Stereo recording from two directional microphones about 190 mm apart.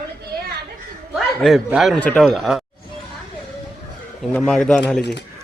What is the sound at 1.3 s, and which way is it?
A man's voice, centre (ahead or behind).